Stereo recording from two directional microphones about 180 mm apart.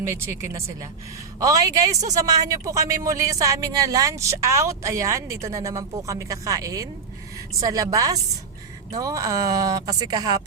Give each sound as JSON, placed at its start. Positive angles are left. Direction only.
{"t": 0.0, "sound": "speech", "side_deg": -15}